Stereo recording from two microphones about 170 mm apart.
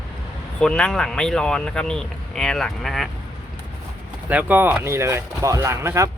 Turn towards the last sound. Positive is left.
turn(degrees=-15)  # may be behind; listen again after turning